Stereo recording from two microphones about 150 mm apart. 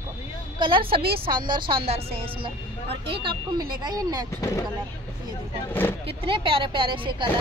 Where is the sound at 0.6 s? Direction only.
35° right (ahead or behind).